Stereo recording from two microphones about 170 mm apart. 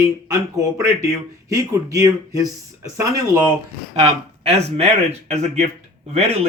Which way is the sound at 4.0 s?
40° right (ahead or behind).